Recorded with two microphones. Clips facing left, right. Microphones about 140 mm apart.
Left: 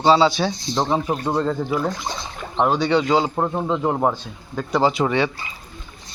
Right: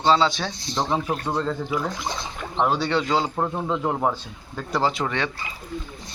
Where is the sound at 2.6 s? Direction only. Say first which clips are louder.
Left 4 dB; centre (ahead or behind).